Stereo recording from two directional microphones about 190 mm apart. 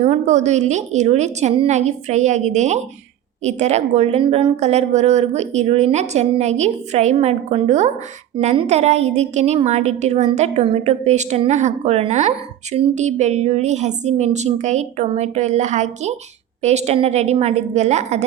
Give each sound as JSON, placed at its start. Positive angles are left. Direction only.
{"t": 0.0, "sound": "a woman's voice", "side_deg": -40}